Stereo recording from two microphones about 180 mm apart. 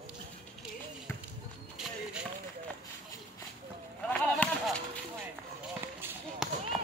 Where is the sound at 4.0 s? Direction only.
5° left (ahead or behind).